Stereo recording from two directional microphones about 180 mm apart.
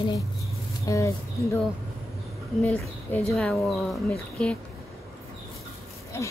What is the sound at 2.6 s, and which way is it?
Speech, 10° left (ahead or behind).